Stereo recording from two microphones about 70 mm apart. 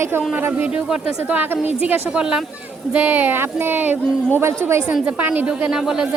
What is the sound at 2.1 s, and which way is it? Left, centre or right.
Speech, centre.